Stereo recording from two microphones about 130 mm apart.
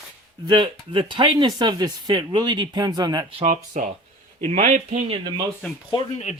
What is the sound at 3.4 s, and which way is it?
A man's voice, 75° right (ahead or behind).